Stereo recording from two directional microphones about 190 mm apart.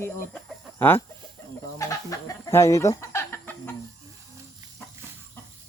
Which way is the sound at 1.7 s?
15° left (ahead or behind).